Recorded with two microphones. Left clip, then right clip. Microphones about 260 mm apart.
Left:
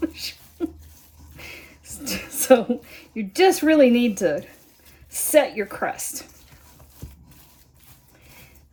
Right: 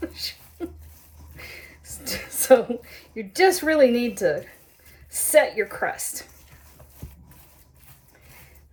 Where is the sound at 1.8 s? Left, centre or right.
Left.